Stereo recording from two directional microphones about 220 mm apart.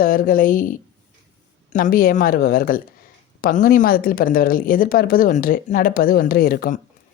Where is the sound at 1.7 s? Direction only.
40° left (ahead or behind).